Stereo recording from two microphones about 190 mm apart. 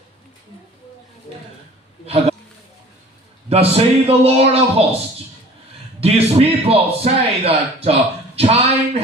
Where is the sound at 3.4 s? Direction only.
30° right (ahead or behind).